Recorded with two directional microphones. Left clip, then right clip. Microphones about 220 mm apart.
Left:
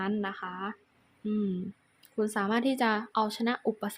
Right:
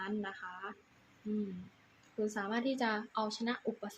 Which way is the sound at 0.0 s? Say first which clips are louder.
Left 7 dB; 30° left (ahead or behind).